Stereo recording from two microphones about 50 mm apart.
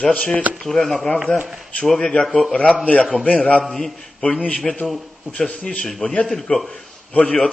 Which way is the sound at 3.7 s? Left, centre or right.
Centre.